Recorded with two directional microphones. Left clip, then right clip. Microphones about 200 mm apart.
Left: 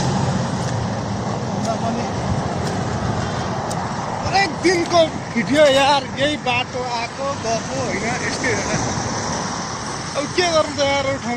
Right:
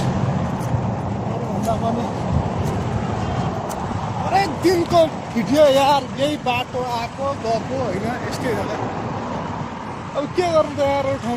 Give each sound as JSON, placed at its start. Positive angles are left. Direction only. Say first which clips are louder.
{"t": 4.4, "sound": "a sound", "louder": "left 1 dB", "side_deg": -20}
{"t": 5.5, "sound": "speech", "louder": "even", "side_deg": -15}
{"t": 10.3, "sound": "speech", "louder": "even", "side_deg": -20}